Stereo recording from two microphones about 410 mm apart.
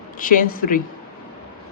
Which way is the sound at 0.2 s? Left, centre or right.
Centre.